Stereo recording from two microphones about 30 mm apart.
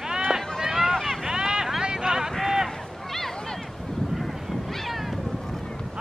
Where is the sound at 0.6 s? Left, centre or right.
Centre.